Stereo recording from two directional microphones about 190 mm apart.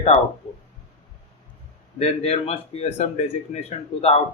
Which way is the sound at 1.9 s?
30° left (ahead or behind).